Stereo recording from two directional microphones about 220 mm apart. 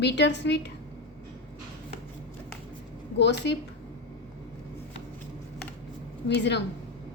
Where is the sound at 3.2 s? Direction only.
50° left (ahead or behind).